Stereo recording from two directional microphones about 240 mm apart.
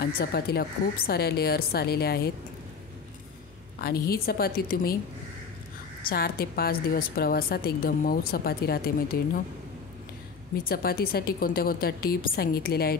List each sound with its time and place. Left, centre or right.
0.0 s a woman's voice: left
4.1 s a woman's voice: left
6.0 s a woman's voice: left
10.6 s a woman's voice: left